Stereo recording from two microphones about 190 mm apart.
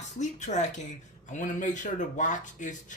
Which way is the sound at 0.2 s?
40° left (ahead or behind).